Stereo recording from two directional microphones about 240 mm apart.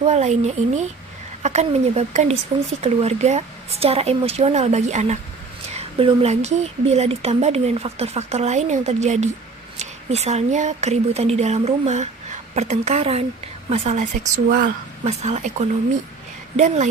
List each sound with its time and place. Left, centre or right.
0.0 s speech: right